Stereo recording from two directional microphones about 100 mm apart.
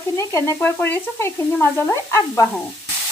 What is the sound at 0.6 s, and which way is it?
Speech, 20° left (ahead or behind).